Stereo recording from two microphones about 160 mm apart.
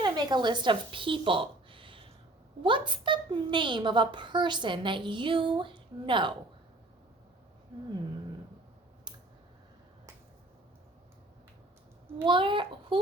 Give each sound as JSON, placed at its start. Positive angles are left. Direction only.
{"t": 0.0, "sound": "a woman's voice", "side_deg": -25}
{"t": 12.2, "sound": "a woman's voice", "side_deg": -30}